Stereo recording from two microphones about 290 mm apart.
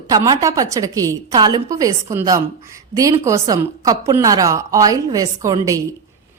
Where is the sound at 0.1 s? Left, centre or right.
Centre.